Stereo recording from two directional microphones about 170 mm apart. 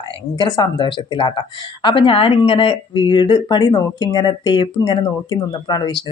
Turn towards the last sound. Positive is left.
turn(degrees=25)  # may be behind; listen again after turning